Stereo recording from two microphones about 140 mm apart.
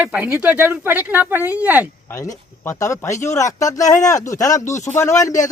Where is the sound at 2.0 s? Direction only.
20° left (ahead or behind).